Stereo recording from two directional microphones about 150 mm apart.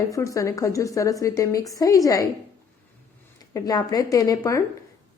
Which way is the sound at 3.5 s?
25° left (ahead or behind).